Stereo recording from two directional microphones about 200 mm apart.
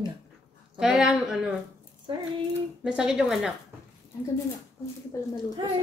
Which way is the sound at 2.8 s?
5° right (ahead or behind).